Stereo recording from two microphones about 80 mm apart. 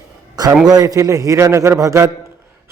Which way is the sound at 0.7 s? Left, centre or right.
Right.